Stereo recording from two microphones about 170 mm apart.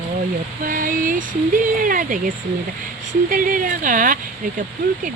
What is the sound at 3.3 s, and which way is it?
Speech, 50° right (ahead or behind).